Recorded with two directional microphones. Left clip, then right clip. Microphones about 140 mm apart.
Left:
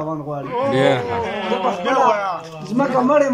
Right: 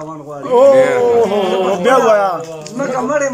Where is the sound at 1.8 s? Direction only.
75° right (ahead or behind).